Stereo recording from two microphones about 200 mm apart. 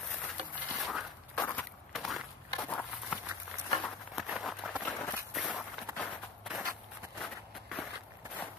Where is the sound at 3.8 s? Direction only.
Centre (ahead or behind).